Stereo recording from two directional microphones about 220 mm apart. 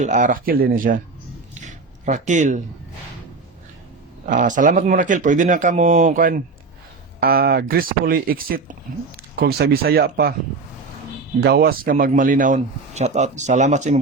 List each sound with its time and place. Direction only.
0.0 s speech: 35° right (ahead or behind)
1.5 s a sound: 35° right (ahead or behind)
4.3 s speech: 35° right (ahead or behind)
11.3 s speech: 45° right (ahead or behind)